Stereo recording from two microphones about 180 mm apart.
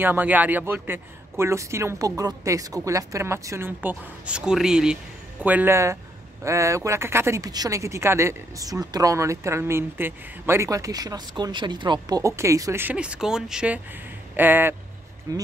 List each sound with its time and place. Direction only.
0.0 s a man's voice: 10° right (ahead or behind)